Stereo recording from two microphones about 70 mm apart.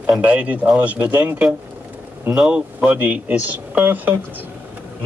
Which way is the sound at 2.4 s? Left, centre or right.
Centre.